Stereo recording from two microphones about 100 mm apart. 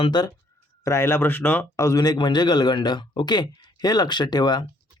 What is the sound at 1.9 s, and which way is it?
A man's voice, 40° left (ahead or behind).